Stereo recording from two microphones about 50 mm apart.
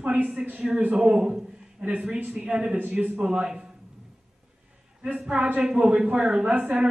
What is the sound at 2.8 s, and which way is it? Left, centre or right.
Speech, right.